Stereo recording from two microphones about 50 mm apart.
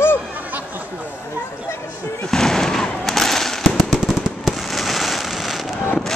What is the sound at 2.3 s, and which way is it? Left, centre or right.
Fireworks, centre.